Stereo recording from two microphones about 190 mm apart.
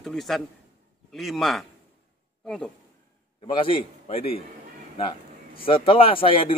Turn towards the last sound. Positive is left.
turn(degrees=30)  # may be behind; listen again after turning